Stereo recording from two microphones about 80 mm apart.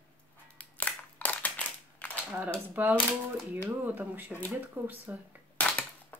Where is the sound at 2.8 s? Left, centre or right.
Right.